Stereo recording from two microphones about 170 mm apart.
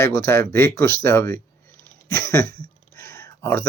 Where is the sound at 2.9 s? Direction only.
15° left (ahead or behind).